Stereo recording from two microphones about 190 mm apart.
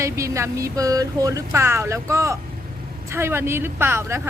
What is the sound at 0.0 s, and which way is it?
Speech, 15° right (ahead or behind).